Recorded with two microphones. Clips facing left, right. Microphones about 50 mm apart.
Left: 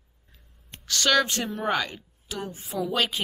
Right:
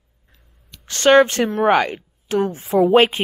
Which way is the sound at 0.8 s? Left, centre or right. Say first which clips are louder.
Right 10 dB; right.